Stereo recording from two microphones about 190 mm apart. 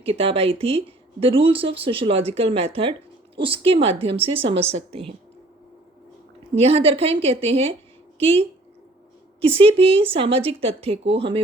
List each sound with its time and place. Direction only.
0.0 s a woman's voice: 30° right (ahead or behind)
6.6 s a woman's voice: 30° right (ahead or behind)